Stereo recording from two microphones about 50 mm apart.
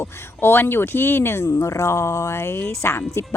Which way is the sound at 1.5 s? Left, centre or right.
Left.